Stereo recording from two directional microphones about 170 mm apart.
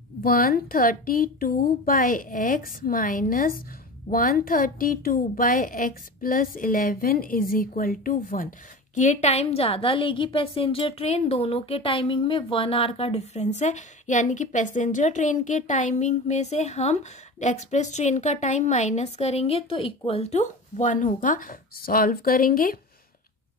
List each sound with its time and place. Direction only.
0.2 s a woman's voice: 60° left (ahead or behind)